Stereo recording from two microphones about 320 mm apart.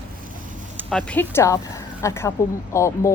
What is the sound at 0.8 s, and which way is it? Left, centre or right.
Speech, centre.